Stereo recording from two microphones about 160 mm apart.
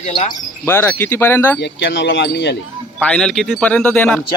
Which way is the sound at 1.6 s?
90° left.